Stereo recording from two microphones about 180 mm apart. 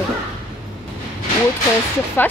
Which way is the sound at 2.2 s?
10° left (ahead or behind).